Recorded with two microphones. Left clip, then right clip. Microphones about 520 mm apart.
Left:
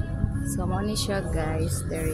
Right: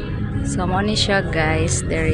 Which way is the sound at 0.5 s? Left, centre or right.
Left.